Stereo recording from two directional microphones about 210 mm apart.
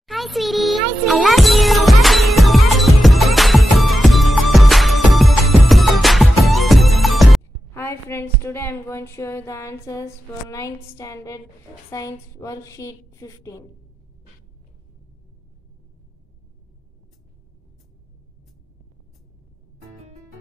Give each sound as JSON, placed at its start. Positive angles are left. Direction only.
{"t": 0.0, "sound": "music", "side_deg": 0}
{"t": 7.7, "sound": "a sound", "side_deg": 10}
{"t": 10.5, "sound": "a woman's voice", "side_deg": 15}